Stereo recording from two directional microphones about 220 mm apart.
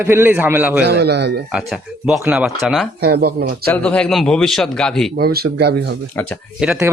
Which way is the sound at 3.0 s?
45° right (ahead or behind).